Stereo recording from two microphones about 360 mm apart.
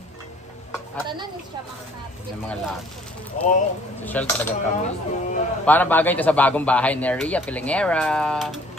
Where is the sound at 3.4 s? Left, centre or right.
Left.